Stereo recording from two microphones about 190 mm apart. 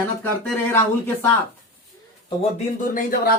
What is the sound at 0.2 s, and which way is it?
Speech, 10° left (ahead or behind).